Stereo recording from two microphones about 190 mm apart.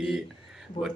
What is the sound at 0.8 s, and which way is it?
Speech, 35° left (ahead or behind).